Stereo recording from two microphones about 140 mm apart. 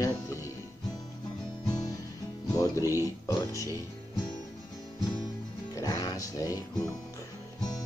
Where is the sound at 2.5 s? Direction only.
25° left (ahead or behind).